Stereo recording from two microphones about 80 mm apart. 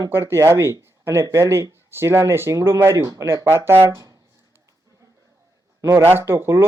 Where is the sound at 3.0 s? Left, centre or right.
Right.